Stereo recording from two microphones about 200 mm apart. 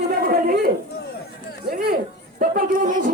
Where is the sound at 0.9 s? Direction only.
50° left (ahead or behind).